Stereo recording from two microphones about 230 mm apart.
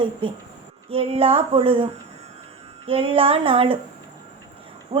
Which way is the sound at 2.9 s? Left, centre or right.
Right.